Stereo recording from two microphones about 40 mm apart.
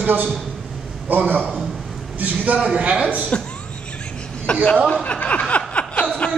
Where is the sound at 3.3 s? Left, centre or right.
Left.